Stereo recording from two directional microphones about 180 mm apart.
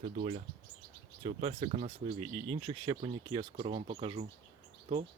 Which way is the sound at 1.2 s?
30° right (ahead or behind).